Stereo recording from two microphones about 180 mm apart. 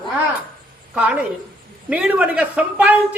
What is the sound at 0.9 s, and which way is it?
A man's voice, 5° right (ahead or behind).